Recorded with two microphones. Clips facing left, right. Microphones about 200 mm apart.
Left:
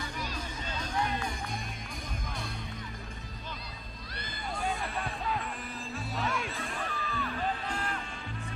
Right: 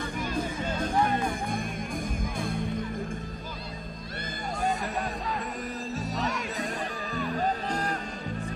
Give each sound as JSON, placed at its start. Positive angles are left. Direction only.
{"t": 0.2, "sound": "music", "side_deg": -50}
{"t": 4.6, "sound": "music", "side_deg": -40}
{"t": 6.2, "sound": "music", "side_deg": -40}